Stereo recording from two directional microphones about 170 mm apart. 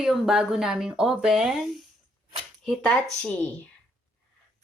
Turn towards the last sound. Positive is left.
turn(degrees=5)  # may be behind; listen again after turning